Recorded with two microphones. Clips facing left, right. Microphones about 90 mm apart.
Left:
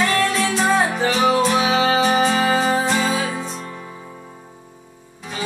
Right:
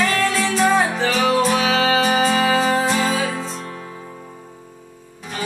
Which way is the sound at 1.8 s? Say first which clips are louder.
Even; 25° left (ahead or behind).